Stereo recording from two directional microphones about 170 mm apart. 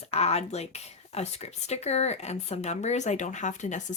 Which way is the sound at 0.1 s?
40° left (ahead or behind).